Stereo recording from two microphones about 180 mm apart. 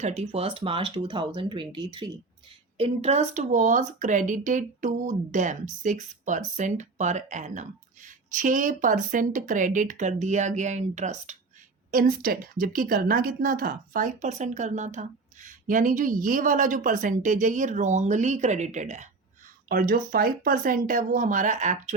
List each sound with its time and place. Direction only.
0.0 s speech: 35° right (ahead or behind)
19.6 s speech: 55° right (ahead or behind)